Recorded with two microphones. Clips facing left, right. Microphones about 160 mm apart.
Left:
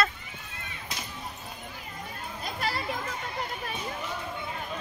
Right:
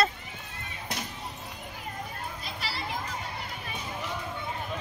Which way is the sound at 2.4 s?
45° left (ahead or behind).